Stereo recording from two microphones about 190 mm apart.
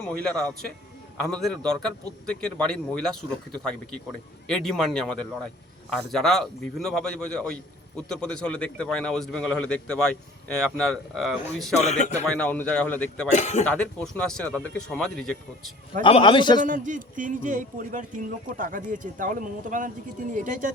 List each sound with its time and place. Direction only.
0.0 s a man's voice: 5° left (ahead or behind)
4.4 s a man's voice: centre (ahead or behind)
11.8 s speech: 35° left (ahead or behind)
12.2 s speech: 5° left (ahead or behind)
13.3 s speech: 40° left (ahead or behind)
13.7 s a man's voice: 5° left (ahead or behind)
16.0 s a man's voice: 25° left (ahead or behind)
16.6 s speech: 40° right (ahead or behind)